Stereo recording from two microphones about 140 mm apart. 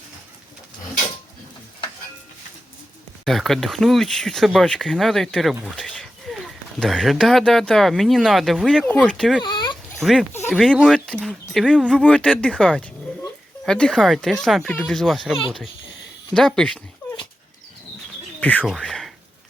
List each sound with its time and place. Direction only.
3.2 s speech: centre (ahead or behind)
9.4 s dog: 35° left (ahead or behind)
10.0 s speech: centre (ahead or behind)
11.9 s speech: 5° left (ahead or behind)
18.3 s speech: 10° left (ahead or behind)
18.8 s a sound: centre (ahead or behind)